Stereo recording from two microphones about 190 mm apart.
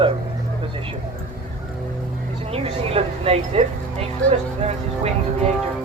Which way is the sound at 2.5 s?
30° right (ahead or behind).